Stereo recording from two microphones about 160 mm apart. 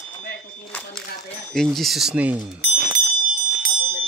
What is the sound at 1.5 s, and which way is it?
Speech, centre (ahead or behind).